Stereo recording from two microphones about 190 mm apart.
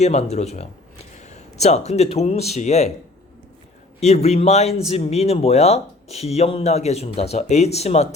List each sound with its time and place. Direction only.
0.0 s speech: 35° left (ahead or behind)
4.0 s speech: 35° left (ahead or behind)